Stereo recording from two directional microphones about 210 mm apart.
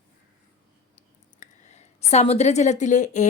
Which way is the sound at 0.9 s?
35° left (ahead or behind).